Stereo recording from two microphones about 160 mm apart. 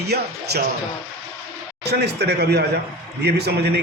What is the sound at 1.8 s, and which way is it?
A man's voice, 90° right.